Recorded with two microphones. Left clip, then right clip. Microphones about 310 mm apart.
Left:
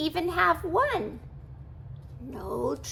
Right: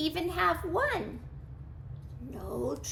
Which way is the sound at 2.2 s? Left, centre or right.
Centre.